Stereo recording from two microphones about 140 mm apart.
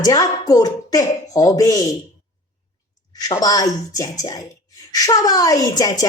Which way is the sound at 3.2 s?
25° left (ahead or behind).